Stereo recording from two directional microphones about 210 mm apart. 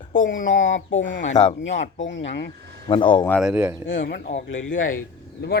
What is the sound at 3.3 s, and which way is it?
Speech, centre (ahead or behind).